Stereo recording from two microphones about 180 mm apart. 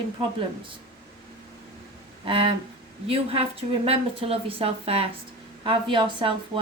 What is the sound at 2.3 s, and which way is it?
A woman's voice, 30° right (ahead or behind).